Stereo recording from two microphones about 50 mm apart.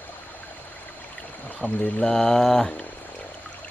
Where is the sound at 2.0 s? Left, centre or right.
Centre.